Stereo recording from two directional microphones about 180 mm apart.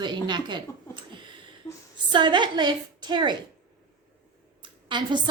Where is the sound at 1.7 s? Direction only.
10° left (ahead or behind).